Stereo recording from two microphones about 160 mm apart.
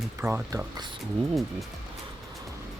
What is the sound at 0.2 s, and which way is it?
Speech, 15° right (ahead or behind).